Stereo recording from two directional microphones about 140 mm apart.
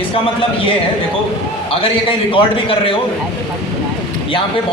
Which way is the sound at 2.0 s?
40° left (ahead or behind).